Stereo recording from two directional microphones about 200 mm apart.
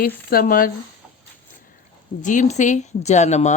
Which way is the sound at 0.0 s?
45° left (ahead or behind).